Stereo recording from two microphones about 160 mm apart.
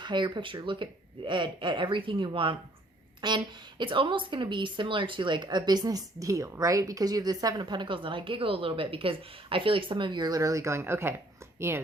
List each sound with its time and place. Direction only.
0.0 s a woman's voice: 30° right (ahead or behind)